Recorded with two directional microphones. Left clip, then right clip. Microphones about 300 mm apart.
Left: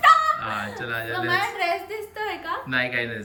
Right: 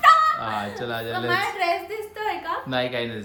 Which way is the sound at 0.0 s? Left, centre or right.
Centre.